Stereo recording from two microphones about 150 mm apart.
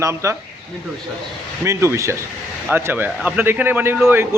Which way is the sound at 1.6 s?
20° right (ahead or behind).